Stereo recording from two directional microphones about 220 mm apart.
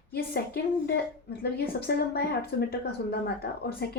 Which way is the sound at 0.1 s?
45° left (ahead or behind).